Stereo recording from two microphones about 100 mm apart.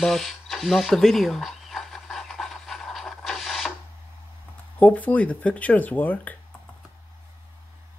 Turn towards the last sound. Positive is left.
turn(degrees=15)  # may be behind; listen again after turning